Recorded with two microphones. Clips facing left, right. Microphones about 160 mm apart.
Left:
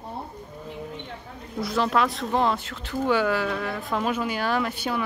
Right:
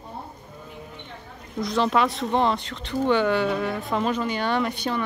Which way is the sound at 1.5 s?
5° left (ahead or behind).